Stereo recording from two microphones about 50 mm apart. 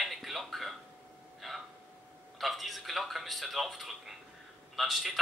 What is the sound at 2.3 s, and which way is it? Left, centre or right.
Speech, centre.